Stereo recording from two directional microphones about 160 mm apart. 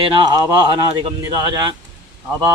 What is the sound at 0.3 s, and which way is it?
Speech, 25° right (ahead or behind).